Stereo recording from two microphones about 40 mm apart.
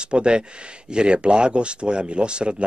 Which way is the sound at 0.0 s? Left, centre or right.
Right.